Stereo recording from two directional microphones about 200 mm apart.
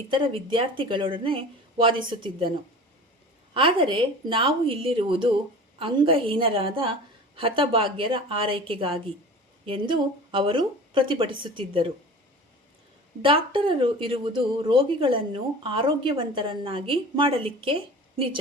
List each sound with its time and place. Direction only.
0.1 s a woman's voice: 25° right (ahead or behind)
3.5 s a woman's voice: 25° right (ahead or behind)
13.2 s a woman's voice: 25° right (ahead or behind)